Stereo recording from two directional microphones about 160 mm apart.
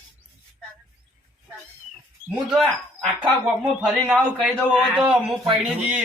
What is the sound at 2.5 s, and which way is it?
Speech, centre (ahead or behind).